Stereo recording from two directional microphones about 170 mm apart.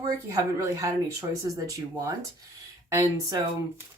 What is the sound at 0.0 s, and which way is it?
Speech, 20° right (ahead or behind).